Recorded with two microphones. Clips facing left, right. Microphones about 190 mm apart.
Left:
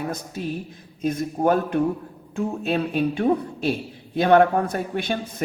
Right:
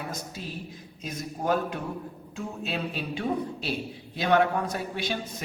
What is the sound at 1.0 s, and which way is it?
Speech, 55° left (ahead or behind).